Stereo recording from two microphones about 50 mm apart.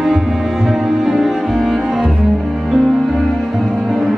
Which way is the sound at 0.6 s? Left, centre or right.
Centre.